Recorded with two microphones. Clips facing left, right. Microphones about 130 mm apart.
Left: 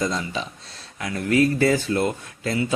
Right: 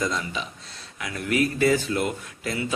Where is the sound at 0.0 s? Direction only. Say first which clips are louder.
Left 2 dB; 30° left (ahead or behind).